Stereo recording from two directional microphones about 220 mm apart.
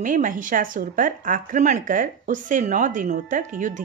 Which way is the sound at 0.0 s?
35° right (ahead or behind).